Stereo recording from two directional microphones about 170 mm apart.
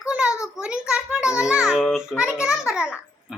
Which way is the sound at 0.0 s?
5° right (ahead or behind).